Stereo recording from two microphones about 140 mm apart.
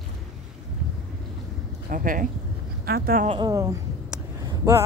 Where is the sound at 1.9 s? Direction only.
70° right (ahead or behind).